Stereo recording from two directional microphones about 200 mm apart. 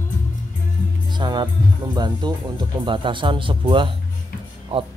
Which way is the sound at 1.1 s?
20° right (ahead or behind).